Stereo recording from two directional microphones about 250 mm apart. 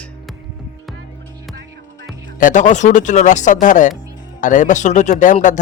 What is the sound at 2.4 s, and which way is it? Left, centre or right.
Speech, left.